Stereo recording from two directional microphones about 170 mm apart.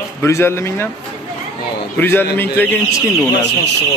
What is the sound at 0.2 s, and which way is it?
Speech, 15° left (ahead or behind).